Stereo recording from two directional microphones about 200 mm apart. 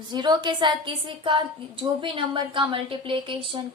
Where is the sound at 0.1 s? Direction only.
20° right (ahead or behind).